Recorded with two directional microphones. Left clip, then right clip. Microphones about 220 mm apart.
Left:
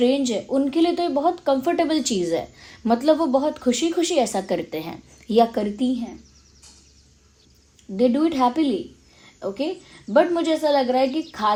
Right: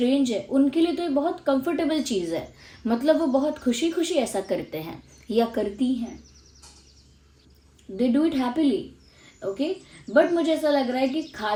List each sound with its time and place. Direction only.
0.0 s speech: 30° left (ahead or behind)
7.9 s speech: 30° left (ahead or behind)
10.1 s speech: 30° left (ahead or behind)